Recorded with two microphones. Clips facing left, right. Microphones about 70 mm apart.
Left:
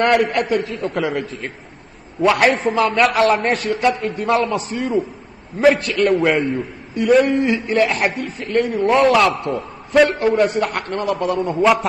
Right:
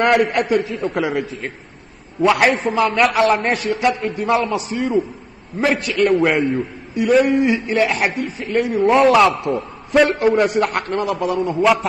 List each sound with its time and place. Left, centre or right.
0.0 s a man's voice: centre